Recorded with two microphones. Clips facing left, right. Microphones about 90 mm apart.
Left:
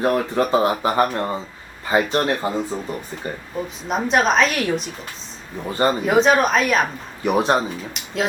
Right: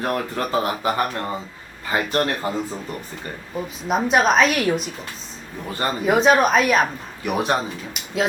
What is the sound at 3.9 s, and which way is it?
Speech, 5° right (ahead or behind).